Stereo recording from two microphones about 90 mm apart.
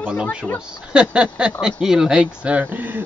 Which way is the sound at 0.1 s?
10° right (ahead or behind).